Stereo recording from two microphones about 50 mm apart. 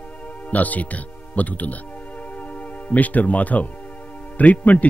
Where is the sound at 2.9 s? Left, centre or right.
Left.